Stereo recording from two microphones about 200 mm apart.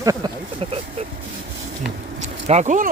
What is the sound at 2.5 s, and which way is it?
Speech, 35° right (ahead or behind).